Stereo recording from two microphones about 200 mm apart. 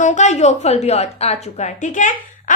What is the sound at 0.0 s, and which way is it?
A woman's voice, 35° left (ahead or behind).